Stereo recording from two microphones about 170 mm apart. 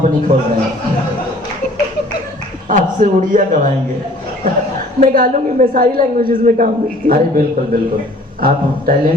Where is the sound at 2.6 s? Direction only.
50° right (ahead or behind).